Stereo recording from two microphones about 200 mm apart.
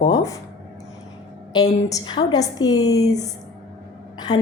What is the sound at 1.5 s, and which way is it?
A woman's voice, 20° left (ahead or behind).